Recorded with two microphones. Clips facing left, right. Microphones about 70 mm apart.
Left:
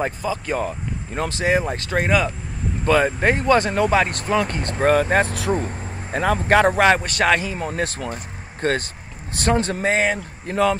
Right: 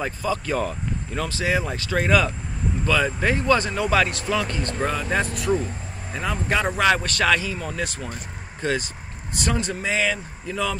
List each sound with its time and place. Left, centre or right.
0.0 s speech: left
1.1 s speech: left
2.0 s speech: centre
2.8 s speech: left
4.4 s speech: left
5.0 s speech: left
6.7 s speech: left
7.0 s speech: left
9.8 s speech: left
10.1 s speech: left